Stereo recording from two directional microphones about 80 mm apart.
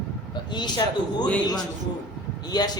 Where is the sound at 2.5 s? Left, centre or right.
Left.